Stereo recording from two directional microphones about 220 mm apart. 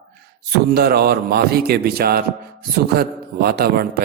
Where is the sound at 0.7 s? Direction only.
45° right (ahead or behind).